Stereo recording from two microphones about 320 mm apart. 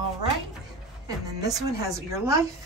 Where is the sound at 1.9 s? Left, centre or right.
Centre.